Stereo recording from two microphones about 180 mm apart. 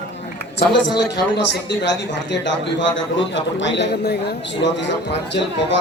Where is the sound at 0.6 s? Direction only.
75° left (ahead or behind).